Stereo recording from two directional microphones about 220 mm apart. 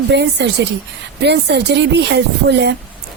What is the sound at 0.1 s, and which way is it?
A woman's voice, 50° right (ahead or behind).